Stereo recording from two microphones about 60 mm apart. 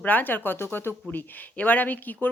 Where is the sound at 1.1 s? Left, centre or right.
Left.